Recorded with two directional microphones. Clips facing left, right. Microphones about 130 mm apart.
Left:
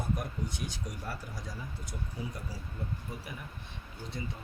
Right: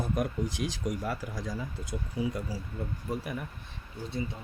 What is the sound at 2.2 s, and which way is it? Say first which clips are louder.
Speech: right 10 dB; 90° right.